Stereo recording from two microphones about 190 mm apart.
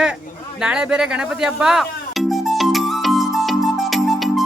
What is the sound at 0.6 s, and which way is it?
Music, 5° right (ahead or behind).